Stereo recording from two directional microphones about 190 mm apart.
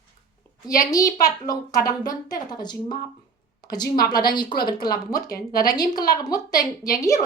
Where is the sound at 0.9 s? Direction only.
20° left (ahead or behind).